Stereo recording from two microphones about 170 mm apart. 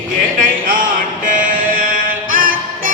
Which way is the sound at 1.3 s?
50° right (ahead or behind).